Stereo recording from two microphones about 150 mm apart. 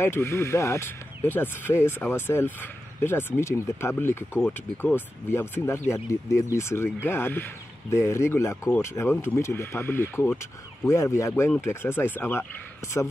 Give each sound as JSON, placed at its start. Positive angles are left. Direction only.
{"t": 0.0, "sound": "a man's voice", "side_deg": 15}